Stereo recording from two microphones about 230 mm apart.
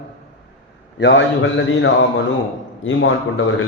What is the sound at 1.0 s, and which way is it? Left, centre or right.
A man's voice, left.